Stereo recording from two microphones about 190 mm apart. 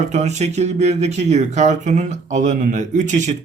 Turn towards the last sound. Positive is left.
turn(degrees=-40)  # may be behind; listen again after turning